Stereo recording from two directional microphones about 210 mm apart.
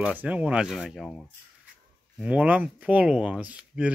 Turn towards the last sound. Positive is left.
turn(degrees=-5)  # may be behind; listen again after turning